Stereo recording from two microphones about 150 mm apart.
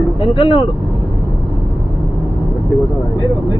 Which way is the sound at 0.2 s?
35° left (ahead or behind).